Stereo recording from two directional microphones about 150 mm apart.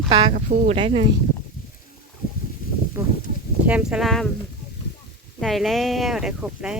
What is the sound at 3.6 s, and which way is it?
Speech, 5° right (ahead or behind).